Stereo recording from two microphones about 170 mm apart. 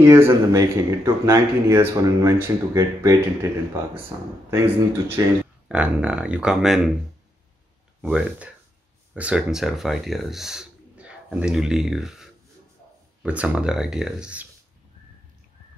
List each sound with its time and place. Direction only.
0.0 s speech: 15° right (ahead or behind)
8.0 s speech: 5° right (ahead or behind)